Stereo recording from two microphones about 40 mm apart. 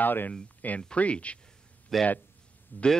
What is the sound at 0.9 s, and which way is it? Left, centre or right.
Speech, left.